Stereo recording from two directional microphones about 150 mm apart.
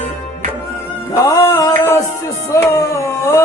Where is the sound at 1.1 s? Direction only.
20° left (ahead or behind).